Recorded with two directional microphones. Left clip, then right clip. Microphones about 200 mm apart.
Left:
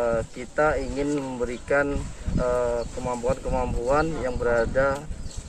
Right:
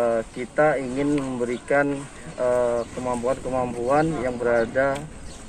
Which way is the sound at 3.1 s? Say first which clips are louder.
Right 1 dB; 25° left (ahead or behind).